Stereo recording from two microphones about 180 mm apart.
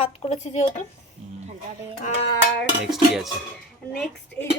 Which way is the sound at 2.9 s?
Centre (ahead or behind).